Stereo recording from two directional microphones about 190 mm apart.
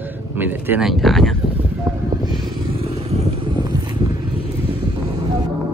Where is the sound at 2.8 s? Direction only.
30° right (ahead or behind).